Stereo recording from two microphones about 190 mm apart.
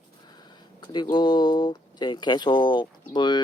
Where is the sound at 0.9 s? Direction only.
25° left (ahead or behind).